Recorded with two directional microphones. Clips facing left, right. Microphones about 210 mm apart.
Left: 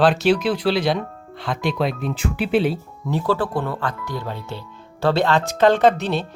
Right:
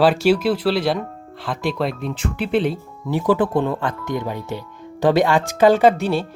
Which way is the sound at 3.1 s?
15° right (ahead or behind).